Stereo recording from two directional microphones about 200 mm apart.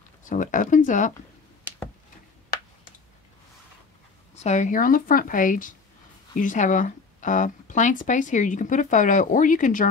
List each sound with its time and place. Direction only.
0.3 s speech: 40° left (ahead or behind)
4.4 s speech: 35° left (ahead or behind)